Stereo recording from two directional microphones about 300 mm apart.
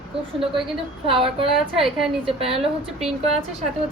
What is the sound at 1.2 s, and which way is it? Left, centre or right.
Speech, centre.